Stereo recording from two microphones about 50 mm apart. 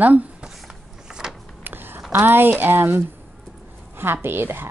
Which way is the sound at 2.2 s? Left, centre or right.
Right.